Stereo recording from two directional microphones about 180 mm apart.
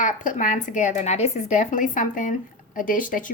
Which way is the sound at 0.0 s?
45° left (ahead or behind).